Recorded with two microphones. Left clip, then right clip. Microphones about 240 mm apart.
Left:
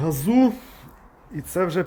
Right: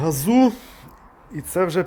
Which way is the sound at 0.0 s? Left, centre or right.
Right.